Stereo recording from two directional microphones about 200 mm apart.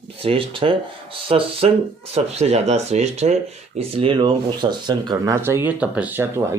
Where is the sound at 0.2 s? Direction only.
25° right (ahead or behind).